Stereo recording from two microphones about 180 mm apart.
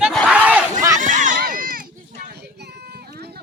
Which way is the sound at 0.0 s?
Centre (ahead or behind).